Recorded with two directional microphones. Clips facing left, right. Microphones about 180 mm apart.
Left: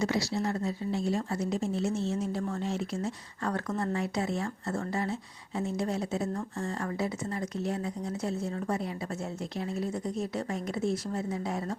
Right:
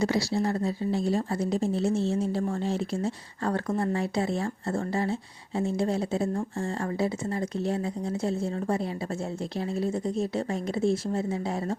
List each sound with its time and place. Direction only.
0.0 s a woman's voice: 30° right (ahead or behind)